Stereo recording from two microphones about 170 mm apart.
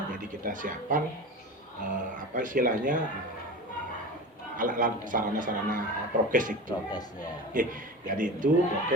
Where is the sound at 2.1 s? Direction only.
50° right (ahead or behind).